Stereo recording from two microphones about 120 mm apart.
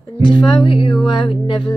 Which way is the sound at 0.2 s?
40° left (ahead or behind).